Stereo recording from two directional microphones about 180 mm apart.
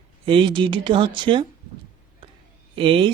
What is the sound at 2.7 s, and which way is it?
Speech, 30° right (ahead or behind).